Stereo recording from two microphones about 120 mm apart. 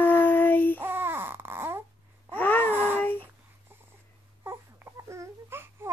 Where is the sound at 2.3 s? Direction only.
15° left (ahead or behind).